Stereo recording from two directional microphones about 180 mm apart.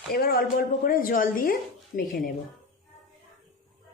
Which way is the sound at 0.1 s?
55° left (ahead or behind).